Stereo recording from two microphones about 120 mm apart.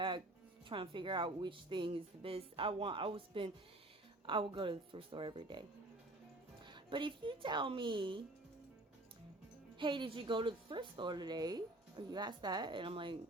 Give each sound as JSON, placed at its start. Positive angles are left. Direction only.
{"t": 0.7, "sound": "speech", "side_deg": -45}
{"t": 6.7, "sound": "speech", "side_deg": -40}
{"t": 9.7, "sound": "a woman's voice", "side_deg": -40}